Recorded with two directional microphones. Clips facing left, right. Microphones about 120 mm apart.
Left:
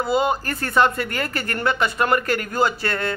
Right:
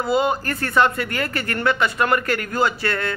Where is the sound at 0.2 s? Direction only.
25° left (ahead or behind).